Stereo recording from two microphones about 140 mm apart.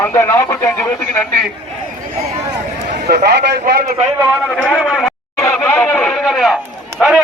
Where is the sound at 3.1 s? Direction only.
90° right.